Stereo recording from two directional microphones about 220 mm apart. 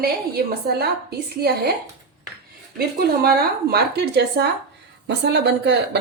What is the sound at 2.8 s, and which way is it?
A woman's voice, 45° right (ahead or behind).